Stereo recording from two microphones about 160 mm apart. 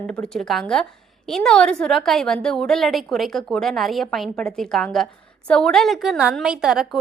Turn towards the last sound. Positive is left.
turn(degrees=-5)  # may be behind; listen again after turning